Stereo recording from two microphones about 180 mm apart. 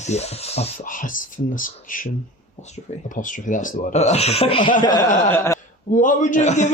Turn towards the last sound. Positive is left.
turn(degrees=40)  # may be behind; listen again after turning